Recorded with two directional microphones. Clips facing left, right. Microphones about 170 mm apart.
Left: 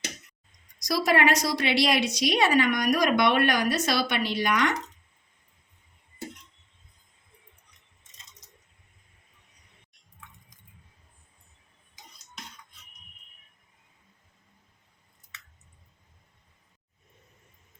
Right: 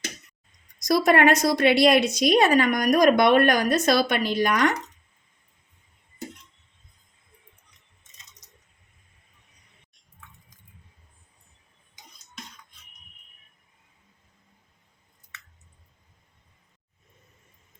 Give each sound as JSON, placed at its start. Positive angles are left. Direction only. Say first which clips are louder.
{"t": 0.8, "sound": "a woman's voice", "louder": "right 5 dB", "side_deg": -55}